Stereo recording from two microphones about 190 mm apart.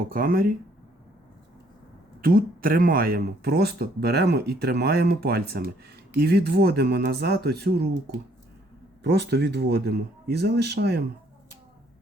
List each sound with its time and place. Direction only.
0.1 s speech: 50° right (ahead or behind)
2.2 s speech: 50° right (ahead or behind)
9.0 s speech: 60° right (ahead or behind)